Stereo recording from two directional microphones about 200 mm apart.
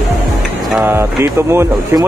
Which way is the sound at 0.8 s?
10° right (ahead or behind).